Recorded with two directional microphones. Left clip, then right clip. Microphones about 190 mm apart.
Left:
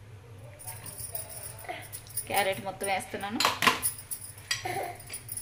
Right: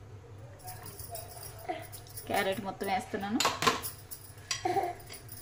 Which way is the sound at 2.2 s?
30° right (ahead or behind).